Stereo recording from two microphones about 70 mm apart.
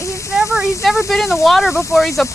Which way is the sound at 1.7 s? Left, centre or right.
Left.